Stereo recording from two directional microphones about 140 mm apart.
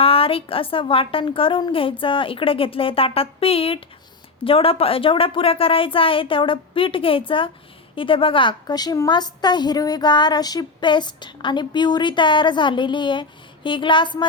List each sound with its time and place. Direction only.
0.0 s a woman's voice: 40° left (ahead or behind)